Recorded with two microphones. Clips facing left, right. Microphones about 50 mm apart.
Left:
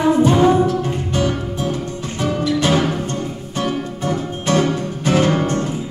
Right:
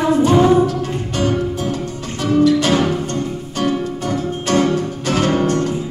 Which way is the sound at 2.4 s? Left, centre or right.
Left.